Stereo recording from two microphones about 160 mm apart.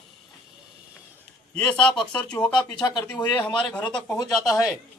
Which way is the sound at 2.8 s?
25° left (ahead or behind).